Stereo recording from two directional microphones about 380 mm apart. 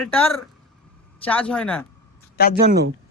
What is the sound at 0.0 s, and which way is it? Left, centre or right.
Speech, centre.